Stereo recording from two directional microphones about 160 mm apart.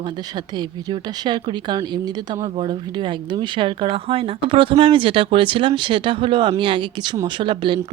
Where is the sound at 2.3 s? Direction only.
35° right (ahead or behind).